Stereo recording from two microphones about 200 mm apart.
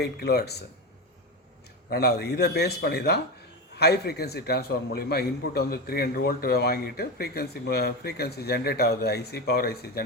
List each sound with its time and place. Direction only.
0.0 s speech: 55° left (ahead or behind)
1.9 s a man's voice: 55° left (ahead or behind)